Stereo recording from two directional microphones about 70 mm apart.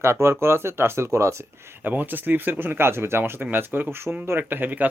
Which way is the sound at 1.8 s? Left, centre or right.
Right.